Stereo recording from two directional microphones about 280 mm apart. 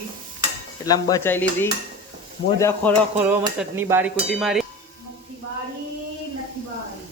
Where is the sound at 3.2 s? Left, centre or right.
Centre.